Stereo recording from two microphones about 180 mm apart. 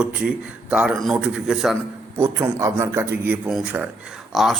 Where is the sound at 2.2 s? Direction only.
15° right (ahead or behind).